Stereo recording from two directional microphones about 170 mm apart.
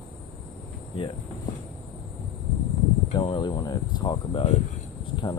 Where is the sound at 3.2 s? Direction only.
30° left (ahead or behind).